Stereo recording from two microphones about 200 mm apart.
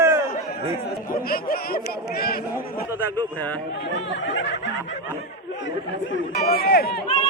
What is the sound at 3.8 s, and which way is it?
Speech, 65° left (ahead or behind).